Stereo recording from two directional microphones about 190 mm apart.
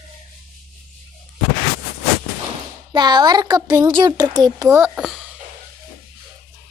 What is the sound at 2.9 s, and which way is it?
A child's voice, 25° right (ahead or behind).